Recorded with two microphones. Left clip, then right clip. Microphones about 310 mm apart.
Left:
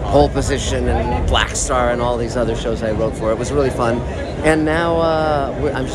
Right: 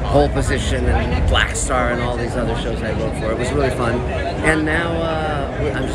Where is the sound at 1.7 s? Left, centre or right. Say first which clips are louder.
Left 4 dB; centre.